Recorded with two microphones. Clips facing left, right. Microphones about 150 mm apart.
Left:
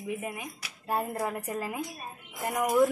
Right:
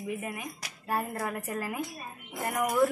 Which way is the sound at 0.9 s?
15° left (ahead or behind).